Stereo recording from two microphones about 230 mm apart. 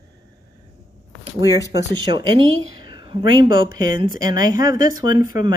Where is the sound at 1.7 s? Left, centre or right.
Centre.